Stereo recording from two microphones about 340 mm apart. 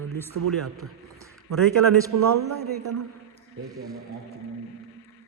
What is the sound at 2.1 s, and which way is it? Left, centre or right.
Speech, right.